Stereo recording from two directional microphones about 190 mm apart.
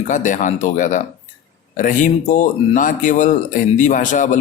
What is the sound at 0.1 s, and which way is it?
Speech, 40° left (ahead or behind).